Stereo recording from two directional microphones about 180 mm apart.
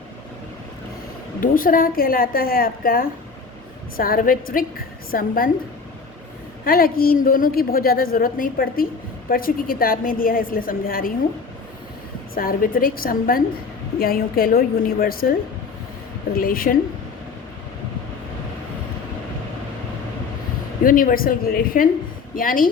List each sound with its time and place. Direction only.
1.4 s a woman's voice: 50° left (ahead or behind)
6.7 s a woman's voice: 55° left (ahead or behind)
12.3 s a woman's voice: 55° left (ahead or behind)
20.8 s a woman's voice: 50° left (ahead or behind)